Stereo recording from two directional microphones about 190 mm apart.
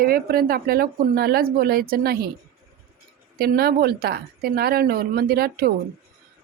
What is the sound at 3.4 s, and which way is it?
Speech, 55° right (ahead or behind).